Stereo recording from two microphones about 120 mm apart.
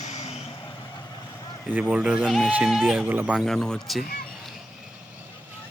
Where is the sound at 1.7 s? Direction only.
15° right (ahead or behind).